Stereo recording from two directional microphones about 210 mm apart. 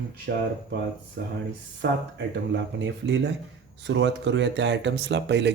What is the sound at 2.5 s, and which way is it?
Speech, 55° right (ahead or behind).